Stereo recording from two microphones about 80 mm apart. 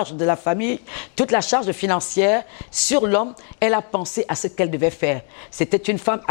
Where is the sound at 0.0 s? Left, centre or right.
Centre.